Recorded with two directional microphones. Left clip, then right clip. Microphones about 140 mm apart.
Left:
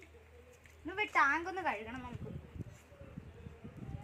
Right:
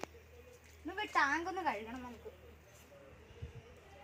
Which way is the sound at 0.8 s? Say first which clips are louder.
Left 3 dB; 35° right (ahead or behind).